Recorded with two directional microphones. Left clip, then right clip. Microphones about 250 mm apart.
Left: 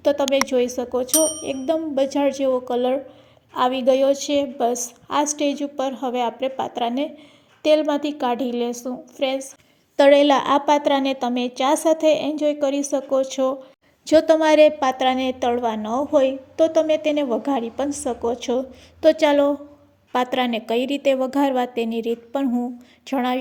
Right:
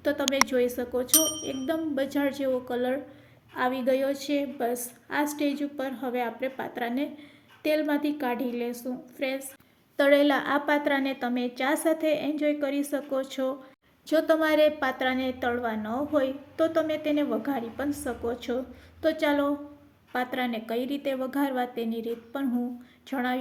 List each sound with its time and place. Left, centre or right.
0.0 s a woman's voice: centre
1.1 s speech: centre
1.5 s a woman's voice: left